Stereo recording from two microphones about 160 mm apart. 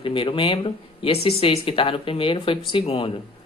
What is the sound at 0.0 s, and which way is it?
Speech, 35° left (ahead or behind).